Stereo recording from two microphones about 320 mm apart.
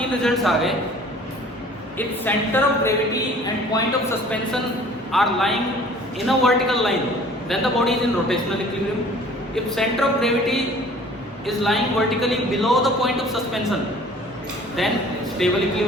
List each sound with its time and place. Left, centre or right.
0.2 s a man's voice: centre
2.0 s a man's voice: centre
9.6 s a man's voice: centre
14.8 s a man's voice: centre